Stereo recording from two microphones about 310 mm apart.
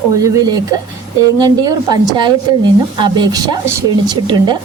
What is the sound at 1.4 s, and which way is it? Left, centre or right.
A woman's voice, centre.